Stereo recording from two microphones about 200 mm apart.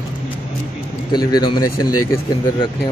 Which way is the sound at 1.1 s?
20° left (ahead or behind).